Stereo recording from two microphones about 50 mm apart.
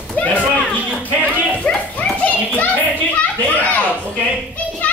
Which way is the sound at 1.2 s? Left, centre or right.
Right.